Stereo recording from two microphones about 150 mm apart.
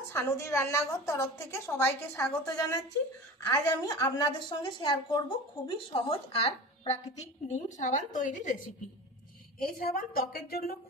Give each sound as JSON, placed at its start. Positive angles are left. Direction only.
{"t": 0.1, "sound": "a woman's voice", "side_deg": 15}
{"t": 7.4, "sound": "a woman's voice", "side_deg": 50}
{"t": 9.8, "sound": "a woman's voice", "side_deg": 80}